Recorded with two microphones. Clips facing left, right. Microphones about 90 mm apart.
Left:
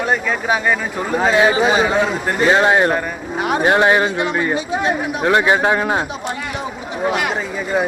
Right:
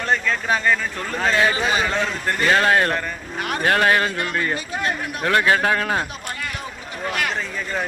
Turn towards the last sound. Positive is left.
turn(degrees=10)  # may be behind; listen again after turning